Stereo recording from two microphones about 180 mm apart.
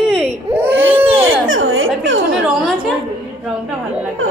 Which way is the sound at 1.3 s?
90° right.